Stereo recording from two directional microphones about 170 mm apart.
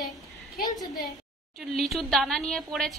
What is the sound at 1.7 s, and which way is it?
Speech, centre (ahead or behind).